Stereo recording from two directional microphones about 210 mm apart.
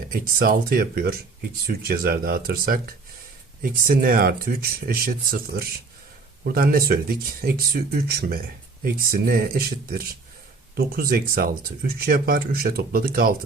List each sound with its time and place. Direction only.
0.1 s speech: 45° right (ahead or behind)